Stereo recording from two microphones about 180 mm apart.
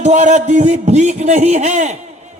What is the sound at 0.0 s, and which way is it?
A man's voice, 40° right (ahead or behind).